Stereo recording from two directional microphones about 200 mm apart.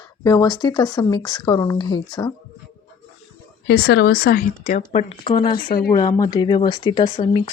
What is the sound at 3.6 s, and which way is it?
Speech, 55° left (ahead or behind).